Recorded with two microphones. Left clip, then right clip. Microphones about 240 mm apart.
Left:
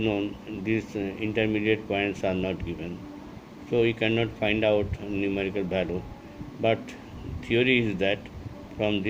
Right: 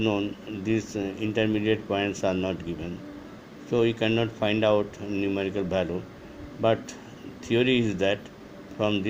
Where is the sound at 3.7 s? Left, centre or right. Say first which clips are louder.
Even; right.